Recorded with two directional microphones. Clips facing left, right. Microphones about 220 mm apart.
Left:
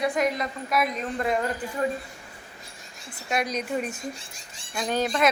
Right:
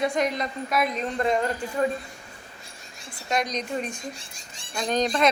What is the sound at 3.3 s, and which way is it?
A woman's voice, 5° left (ahead or behind).